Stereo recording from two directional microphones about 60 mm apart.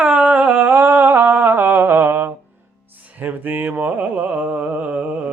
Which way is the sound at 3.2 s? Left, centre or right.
Right.